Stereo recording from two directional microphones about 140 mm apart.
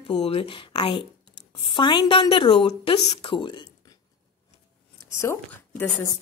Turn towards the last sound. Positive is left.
turn(degrees=15)  # may be behind; listen again after turning